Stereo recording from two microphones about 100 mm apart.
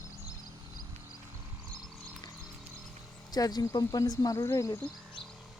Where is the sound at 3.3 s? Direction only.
40° left (ahead or behind).